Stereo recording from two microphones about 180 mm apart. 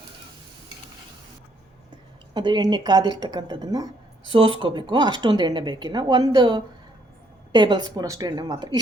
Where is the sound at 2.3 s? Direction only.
25° right (ahead or behind).